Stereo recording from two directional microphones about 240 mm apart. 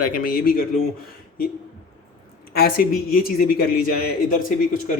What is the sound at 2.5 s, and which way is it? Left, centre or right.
Speech, left.